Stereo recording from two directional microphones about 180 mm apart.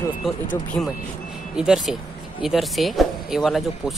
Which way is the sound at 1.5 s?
5° right (ahead or behind).